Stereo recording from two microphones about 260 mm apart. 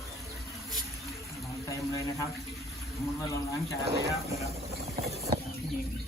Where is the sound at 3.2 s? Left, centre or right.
Centre.